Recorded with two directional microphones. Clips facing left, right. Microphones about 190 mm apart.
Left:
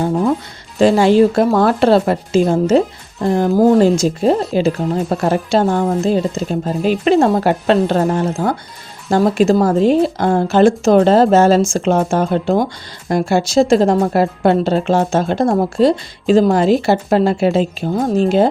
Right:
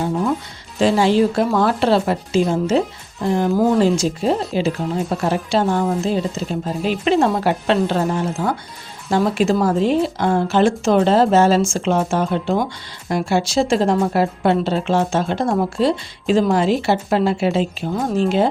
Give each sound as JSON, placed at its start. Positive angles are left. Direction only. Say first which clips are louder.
{"t": 0.8, "sound": "a woman's voice", "louder": "left 5 dB", "side_deg": 50}